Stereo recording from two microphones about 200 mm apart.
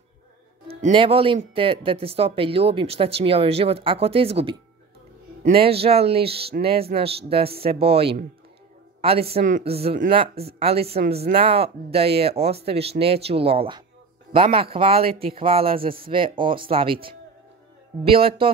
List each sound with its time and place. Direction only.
0.9 s a woman's voice: 25° right (ahead or behind)
18.1 s speech: 25° right (ahead or behind)